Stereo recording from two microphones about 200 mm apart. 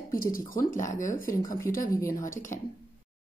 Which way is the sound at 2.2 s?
40° left (ahead or behind).